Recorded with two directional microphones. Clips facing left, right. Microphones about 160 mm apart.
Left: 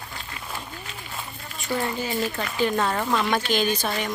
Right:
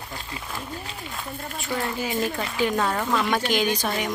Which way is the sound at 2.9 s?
10° left (ahead or behind).